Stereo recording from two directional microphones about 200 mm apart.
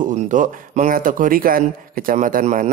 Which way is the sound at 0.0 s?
40° right (ahead or behind).